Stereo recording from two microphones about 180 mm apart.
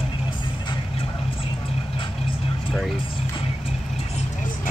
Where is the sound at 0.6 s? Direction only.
30° left (ahead or behind).